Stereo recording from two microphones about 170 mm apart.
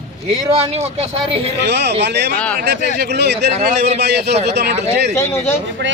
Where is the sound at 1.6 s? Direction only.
90° right.